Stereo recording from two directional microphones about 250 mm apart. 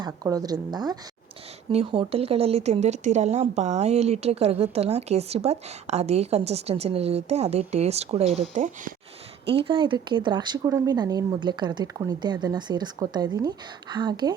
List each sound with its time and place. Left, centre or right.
0.0 s speech: centre